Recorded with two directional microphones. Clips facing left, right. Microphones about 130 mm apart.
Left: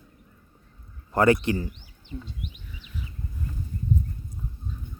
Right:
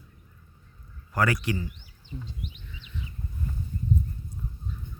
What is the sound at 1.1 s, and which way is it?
Speech, 25° left (ahead or behind).